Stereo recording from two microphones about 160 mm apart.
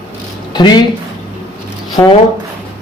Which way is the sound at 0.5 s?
25° left (ahead or behind).